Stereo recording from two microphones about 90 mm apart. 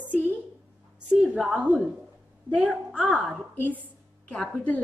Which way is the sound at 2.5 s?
15° right (ahead or behind).